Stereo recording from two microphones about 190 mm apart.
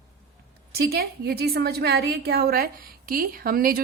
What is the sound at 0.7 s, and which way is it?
A woman's voice, 55° right (ahead or behind).